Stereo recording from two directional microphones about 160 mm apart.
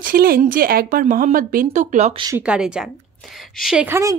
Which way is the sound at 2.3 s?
5° right (ahead or behind).